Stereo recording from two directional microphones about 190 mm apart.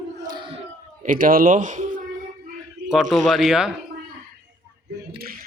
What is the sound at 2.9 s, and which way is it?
Speech, centre (ahead or behind).